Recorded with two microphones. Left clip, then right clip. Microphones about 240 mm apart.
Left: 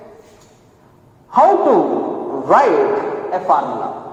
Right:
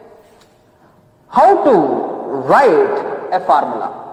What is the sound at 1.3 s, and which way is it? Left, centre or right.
Speech, right.